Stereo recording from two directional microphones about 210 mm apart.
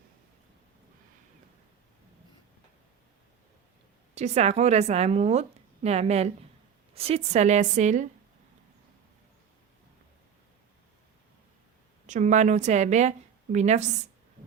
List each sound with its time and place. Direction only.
4.1 s speech: 30° right (ahead or behind)
12.0 s speech: 35° right (ahead or behind)